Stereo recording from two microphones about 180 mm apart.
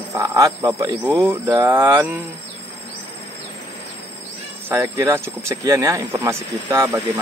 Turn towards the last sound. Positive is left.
turn(degrees=-15)  # may be behind; listen again after turning